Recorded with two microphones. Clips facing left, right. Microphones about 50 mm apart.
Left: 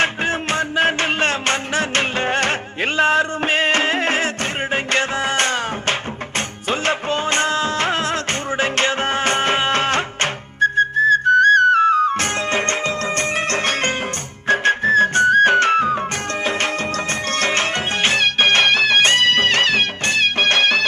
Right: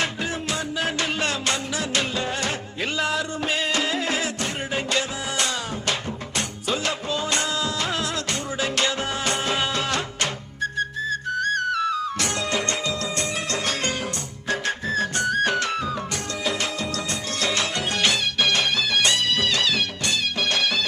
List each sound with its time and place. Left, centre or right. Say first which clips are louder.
0.0 s music: left 7 dB; left
6.7 s music of bollywood: left 6 dB; left
8.5 s music: left 6 dB; left
10.6 s whistle: left 11 dB; left
13.1 s music: left 6 dB; left
17.4 s music: left 4 dB; left